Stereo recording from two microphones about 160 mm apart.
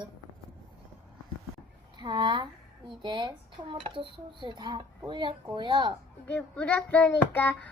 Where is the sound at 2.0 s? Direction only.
30° right (ahead or behind).